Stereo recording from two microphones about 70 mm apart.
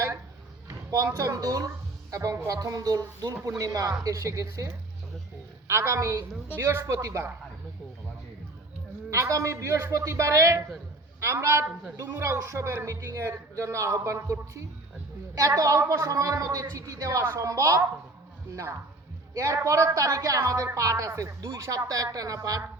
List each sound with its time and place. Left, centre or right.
0.9 s speech: right
1.4 s speech: right
6.6 s a man's voice: right
6.8 s speech: right
9.0 s a man's voice: right
11.9 s speech: right
12.3 s speech: right
19.3 s a man's voice: right